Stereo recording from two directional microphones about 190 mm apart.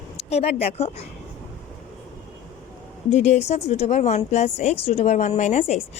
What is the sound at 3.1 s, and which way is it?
A woman's voice, 35° left (ahead or behind).